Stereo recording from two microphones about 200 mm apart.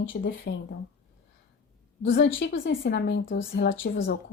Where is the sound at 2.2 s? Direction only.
65° left (ahead or behind).